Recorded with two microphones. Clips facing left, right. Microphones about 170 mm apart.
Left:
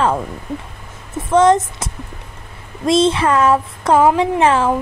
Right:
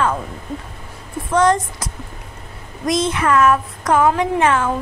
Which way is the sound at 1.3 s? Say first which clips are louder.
Left 4 dB; 25° left (ahead or behind).